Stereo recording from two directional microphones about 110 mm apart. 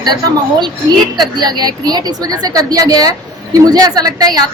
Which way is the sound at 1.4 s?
40° right (ahead or behind).